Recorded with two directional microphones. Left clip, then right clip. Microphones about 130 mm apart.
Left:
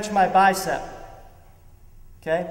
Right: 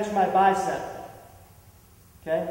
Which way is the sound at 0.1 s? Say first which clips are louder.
Left 4 dB; 35° left (ahead or behind).